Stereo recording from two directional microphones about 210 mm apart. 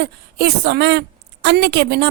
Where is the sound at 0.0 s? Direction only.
55° right (ahead or behind).